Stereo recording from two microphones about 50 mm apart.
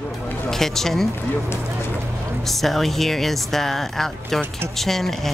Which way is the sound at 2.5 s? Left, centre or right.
Centre.